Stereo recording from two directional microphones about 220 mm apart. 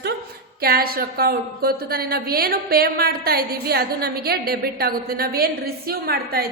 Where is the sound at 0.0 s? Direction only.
45° right (ahead or behind).